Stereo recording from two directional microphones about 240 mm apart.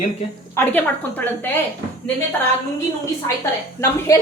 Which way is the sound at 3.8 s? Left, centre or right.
Centre.